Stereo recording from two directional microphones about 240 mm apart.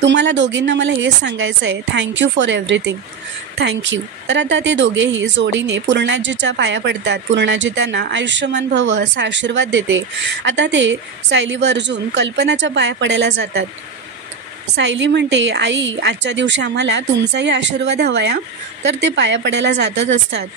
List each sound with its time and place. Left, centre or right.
0.0 s speech: right
14.8 s speech: right